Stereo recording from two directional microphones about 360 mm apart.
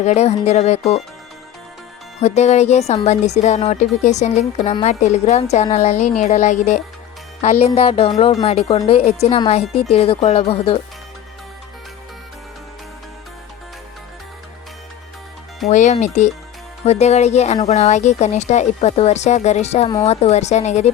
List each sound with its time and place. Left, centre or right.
0.0 s a woman's voice: centre
2.2 s a woman's voice: centre
15.6 s a woman's voice: centre